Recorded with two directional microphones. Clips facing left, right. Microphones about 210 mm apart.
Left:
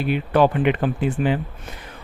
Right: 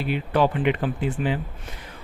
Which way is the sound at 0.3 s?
60° left (ahead or behind).